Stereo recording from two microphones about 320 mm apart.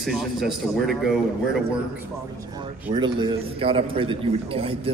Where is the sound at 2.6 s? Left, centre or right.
Centre.